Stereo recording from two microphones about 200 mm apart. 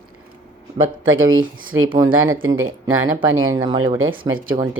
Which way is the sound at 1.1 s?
90° right.